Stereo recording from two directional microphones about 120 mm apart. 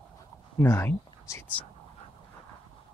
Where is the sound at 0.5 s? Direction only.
20° left (ahead or behind).